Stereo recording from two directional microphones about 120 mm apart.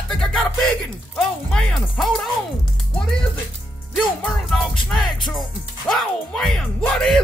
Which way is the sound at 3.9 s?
Centre (ahead or behind).